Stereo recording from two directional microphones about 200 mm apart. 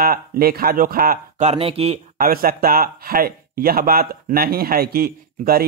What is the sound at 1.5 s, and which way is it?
Speech, 30° right (ahead or behind).